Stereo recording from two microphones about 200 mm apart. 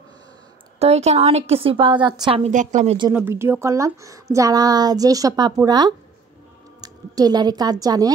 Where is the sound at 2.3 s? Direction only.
35° right (ahead or behind).